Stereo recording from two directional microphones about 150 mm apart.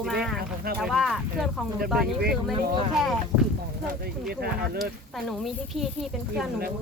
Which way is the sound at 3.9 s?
90° right.